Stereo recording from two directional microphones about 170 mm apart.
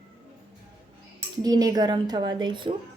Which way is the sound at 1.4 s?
20° right (ahead or behind).